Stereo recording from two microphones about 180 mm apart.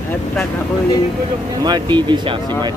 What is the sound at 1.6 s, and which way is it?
Speech, 25° right (ahead or behind).